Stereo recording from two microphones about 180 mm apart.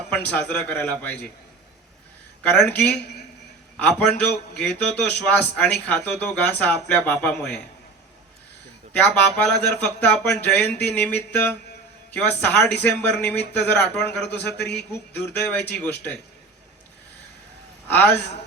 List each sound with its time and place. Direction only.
0.1 s a man's voice: 10° left (ahead or behind)
2.4 s a man's voice: 10° left (ahead or behind)
8.9 s a man's voice: 10° left (ahead or behind)
14.6 s a man's voice: 65° left (ahead or behind)
15.3 s a man's voice: 10° left (ahead or behind)
17.8 s a man's voice: 10° left (ahead or behind)